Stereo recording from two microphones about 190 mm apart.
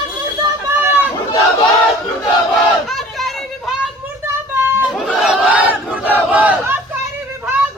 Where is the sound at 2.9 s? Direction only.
Centre (ahead or behind).